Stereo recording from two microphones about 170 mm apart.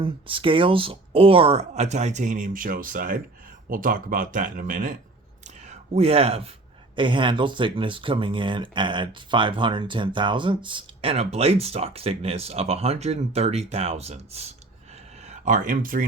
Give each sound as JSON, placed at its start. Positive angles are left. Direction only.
{"t": 0.0, "sound": "speech", "side_deg": -30}
{"t": 5.4, "sound": "whispering", "side_deg": -45}
{"t": 6.9, "sound": "speech", "side_deg": -30}